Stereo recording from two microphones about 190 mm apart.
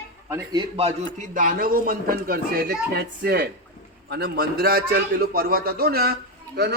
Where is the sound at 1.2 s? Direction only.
45° right (ahead or behind).